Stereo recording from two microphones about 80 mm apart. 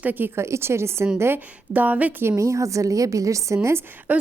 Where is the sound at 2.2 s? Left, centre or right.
Right.